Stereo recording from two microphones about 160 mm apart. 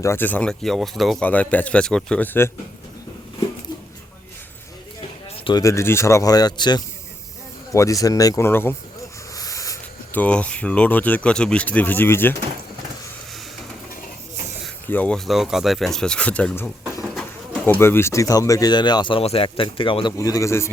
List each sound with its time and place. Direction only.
0.0 s speech: 15° left (ahead or behind)
5.5 s speech: 20° left (ahead or behind)
9.3 s a sound: 20° left (ahead or behind)
10.2 s speech: 10° left (ahead or behind)
14.8 s speech: 10° left (ahead or behind)
17.2 s bird: 5° left (ahead or behind)
17.7 s speech: 15° left (ahead or behind); by 20.1 s 30° left (ahead or behind)
20.1 s speech: 20° left (ahead or behind)